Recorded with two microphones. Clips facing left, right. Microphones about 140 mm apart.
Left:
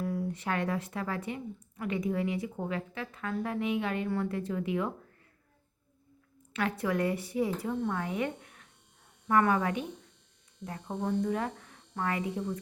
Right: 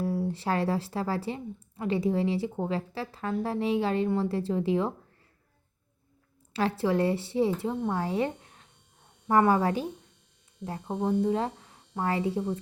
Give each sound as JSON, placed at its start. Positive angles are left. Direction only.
{"t": 0.0, "sound": "a woman's voice", "side_deg": -30}
{"t": 6.5, "sound": "a woman's voice", "side_deg": -30}